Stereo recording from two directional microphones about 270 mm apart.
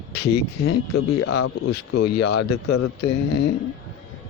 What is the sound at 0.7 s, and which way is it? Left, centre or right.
Speech, left.